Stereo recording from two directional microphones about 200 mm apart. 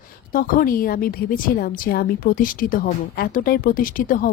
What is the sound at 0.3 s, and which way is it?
A woman's voice, 45° left (ahead or behind).